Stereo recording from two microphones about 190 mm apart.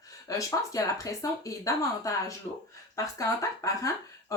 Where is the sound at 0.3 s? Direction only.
20° left (ahead or behind).